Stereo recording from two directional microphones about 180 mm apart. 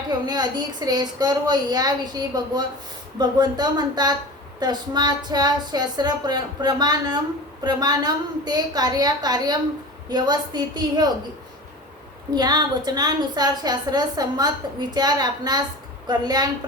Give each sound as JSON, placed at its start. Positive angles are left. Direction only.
{"t": 0.1, "sound": "a woman's voice", "side_deg": -20}
{"t": 12.3, "sound": "a woman's voice", "side_deg": -25}